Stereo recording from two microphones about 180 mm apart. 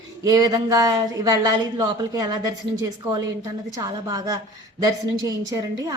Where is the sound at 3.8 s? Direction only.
20° right (ahead or behind).